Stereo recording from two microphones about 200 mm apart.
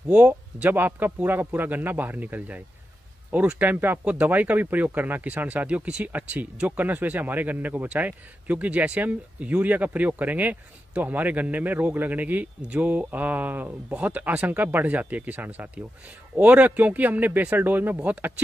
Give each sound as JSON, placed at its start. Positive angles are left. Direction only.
{"t": 0.1, "sound": "speech", "side_deg": -5}